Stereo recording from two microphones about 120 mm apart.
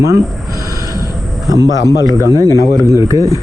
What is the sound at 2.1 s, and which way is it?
Speech, 30° right (ahead or behind).